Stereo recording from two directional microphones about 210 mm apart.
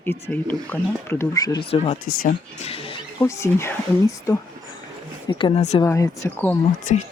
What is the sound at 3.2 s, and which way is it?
Speech, 15° left (ahead or behind).